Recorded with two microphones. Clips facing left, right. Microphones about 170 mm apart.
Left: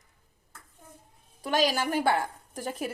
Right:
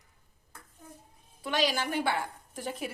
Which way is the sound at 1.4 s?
45° left (ahead or behind).